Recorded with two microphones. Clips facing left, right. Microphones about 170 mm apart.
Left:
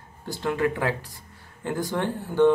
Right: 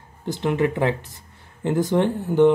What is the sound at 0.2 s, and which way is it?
Speech, 20° right (ahead or behind).